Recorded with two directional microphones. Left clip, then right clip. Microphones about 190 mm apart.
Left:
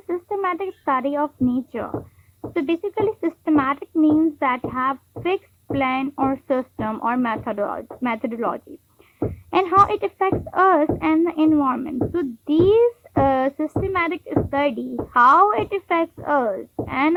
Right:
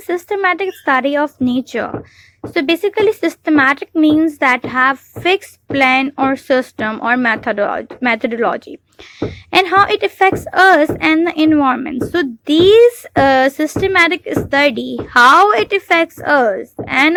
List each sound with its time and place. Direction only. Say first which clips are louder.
0.1 s a woman's voice: right 8 dB; 30° right (ahead or behind)